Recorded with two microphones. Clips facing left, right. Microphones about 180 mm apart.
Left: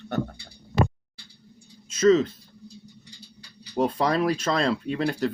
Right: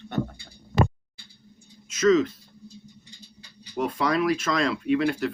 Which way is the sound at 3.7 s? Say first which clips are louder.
Left 2 dB; 35° left (ahead or behind).